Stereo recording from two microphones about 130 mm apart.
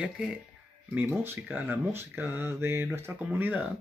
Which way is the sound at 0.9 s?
15° right (ahead or behind).